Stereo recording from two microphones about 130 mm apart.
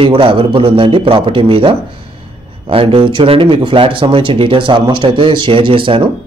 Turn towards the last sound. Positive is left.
turn(degrees=-40)  # may be behind; listen again after turning